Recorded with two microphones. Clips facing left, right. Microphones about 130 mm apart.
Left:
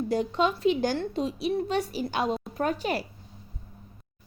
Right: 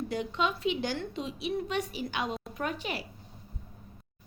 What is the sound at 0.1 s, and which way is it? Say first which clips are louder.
A woman's voice: left 7 dB; 40° left (ahead or behind).